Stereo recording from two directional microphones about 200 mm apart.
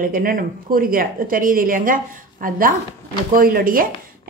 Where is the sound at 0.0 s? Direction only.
45° right (ahead or behind).